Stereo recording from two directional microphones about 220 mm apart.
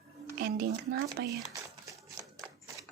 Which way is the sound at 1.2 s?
50° right (ahead or behind).